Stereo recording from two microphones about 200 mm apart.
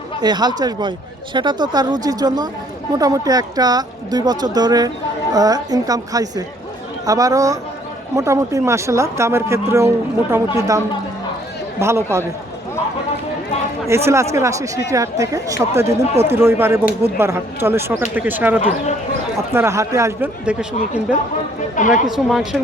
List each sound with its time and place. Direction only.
0.2 s speech: 20° right (ahead or behind)
13.8 s speech: 15° right (ahead or behind)
21.8 s speech: 40° left (ahead or behind)
22.0 s speech: centre (ahead or behind)